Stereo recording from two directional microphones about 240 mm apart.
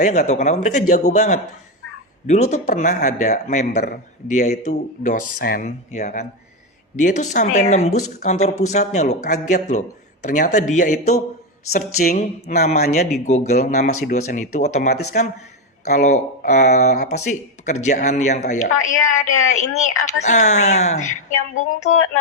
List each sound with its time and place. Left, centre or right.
0.0 s speech: left
19.3 s a woman's voice: left
20.2 s speech: left